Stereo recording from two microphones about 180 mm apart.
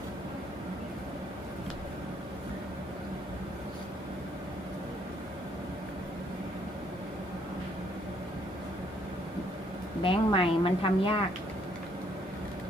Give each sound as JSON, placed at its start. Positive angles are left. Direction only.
{"t": 10.0, "sound": "a woman's voice", "side_deg": 30}